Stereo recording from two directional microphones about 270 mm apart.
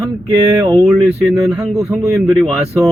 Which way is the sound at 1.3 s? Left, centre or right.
Centre.